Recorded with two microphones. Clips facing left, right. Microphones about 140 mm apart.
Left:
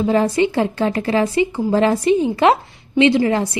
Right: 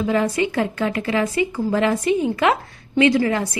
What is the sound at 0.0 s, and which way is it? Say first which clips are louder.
A woman's voice: left 4 dB; 30° left (ahead or behind).